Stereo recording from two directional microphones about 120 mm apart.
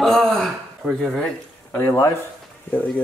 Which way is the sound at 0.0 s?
Centre (ahead or behind).